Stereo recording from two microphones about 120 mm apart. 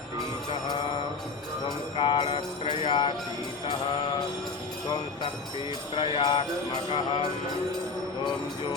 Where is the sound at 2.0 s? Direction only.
45° left (ahead or behind).